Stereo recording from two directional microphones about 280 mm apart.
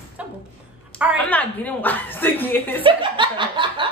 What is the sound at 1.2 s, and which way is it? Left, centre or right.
A woman's voice, centre.